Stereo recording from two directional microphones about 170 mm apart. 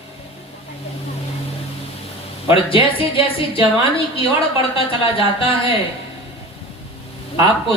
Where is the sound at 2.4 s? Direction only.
30° left (ahead or behind).